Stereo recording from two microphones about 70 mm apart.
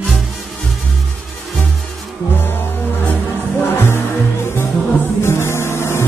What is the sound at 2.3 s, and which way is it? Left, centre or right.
Music, left.